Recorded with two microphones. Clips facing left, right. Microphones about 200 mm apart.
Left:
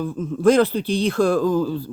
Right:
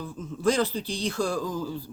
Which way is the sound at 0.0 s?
55° left (ahead or behind).